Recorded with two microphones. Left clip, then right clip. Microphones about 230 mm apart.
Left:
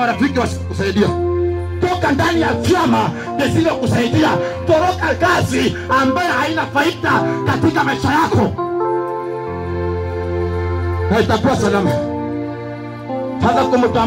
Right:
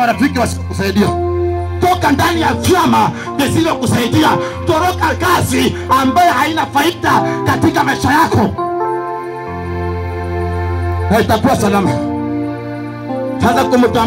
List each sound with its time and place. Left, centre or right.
0.0 s music: right
11.1 s music: right
13.4 s music: right